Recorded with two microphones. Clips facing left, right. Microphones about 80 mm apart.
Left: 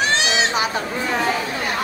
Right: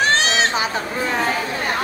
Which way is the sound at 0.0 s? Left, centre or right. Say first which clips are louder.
Right 2 dB; right.